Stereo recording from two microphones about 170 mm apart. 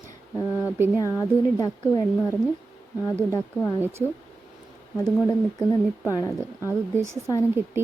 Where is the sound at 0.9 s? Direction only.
20° left (ahead or behind).